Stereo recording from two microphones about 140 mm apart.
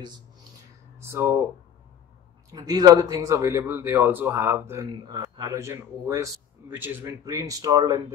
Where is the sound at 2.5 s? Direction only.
25° right (ahead or behind).